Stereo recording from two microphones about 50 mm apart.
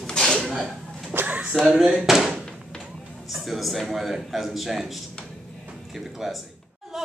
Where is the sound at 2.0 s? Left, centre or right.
Centre.